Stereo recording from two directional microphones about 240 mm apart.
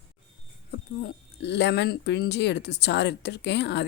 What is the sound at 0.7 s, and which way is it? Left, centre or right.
Speech, left.